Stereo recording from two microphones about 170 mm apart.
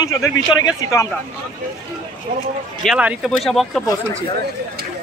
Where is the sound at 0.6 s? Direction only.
20° left (ahead or behind).